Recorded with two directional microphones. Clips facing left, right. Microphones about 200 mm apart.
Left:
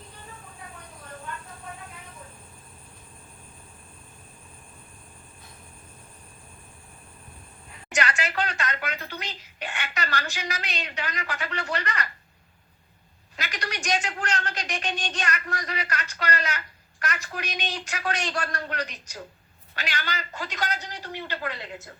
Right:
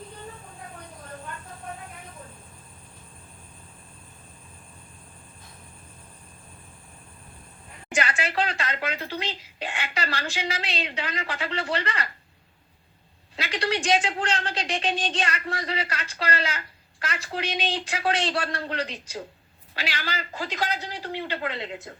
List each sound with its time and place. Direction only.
7.9 s a woman's voice: 30° right (ahead or behind)
13.3 s a woman's voice: 30° right (ahead or behind)
21.2 s speech: 20° right (ahead or behind)